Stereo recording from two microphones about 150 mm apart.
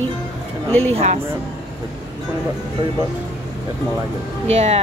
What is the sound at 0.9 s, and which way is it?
Speech, 40° right (ahead or behind).